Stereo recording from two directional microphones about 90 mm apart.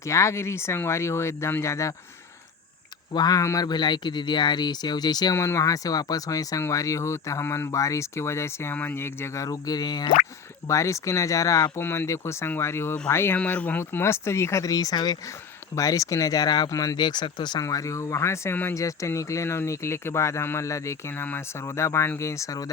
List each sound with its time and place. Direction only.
0.0 s speech: 35° left (ahead or behind)
3.2 s speech: 45° left (ahead or behind)
5.4 s speech: 35° left (ahead or behind)
10.7 s speech: 35° left (ahead or behind)
11.8 s speech: 25° left (ahead or behind); by 17.6 s 55° left (ahead or behind)
17.6 s speech: 40° left (ahead or behind)